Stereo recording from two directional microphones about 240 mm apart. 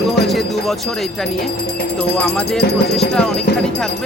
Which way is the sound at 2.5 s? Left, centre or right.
Left.